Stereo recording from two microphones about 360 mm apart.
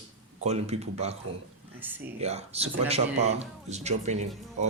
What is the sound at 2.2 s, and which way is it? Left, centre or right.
Music, centre.